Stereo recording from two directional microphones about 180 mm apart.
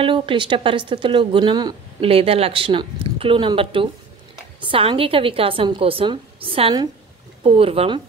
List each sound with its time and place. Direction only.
0.0 s a woman's voice: 30° right (ahead or behind)